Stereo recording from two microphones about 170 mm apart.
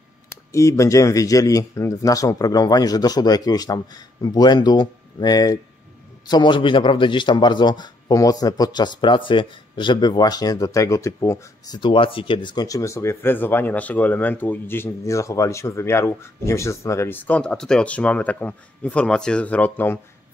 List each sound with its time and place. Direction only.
0.3 s a man's voice: 15° left (ahead or behind)